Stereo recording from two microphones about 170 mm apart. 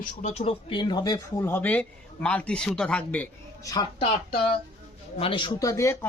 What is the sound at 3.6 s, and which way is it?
Speech, 20° left (ahead or behind).